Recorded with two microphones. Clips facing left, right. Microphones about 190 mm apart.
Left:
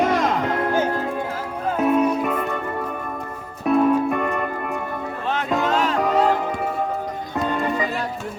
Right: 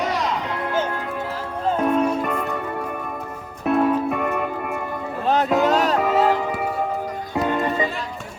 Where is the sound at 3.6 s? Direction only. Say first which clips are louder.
Left 2 dB; centre (ahead or behind).